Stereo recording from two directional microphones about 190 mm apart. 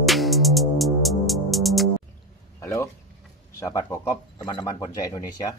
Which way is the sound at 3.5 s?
15° left (ahead or behind).